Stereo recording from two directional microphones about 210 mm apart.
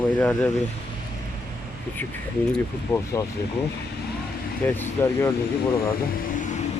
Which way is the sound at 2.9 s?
15° left (ahead or behind).